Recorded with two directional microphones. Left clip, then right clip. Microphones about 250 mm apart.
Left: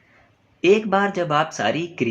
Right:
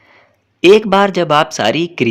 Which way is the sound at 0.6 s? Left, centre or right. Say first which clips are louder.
Right 9 dB; right.